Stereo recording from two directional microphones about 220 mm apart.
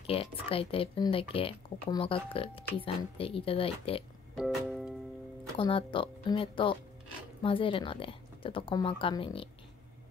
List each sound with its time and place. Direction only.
0.0 s speech: 25° left (ahead or behind)
4.4 s music: centre (ahead or behind)
5.6 s speech: 25° left (ahead or behind)